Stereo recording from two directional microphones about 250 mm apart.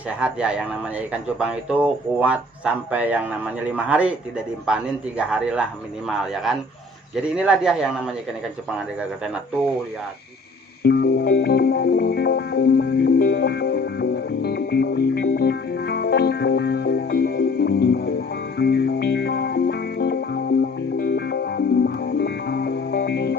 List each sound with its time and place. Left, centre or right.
0.2 s a man's voice: centre
10.8 s music: left